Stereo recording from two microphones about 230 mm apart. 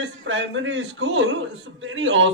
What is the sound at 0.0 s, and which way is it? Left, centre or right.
Speech, right.